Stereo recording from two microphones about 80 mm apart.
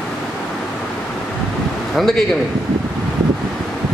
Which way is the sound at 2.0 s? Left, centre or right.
Centre.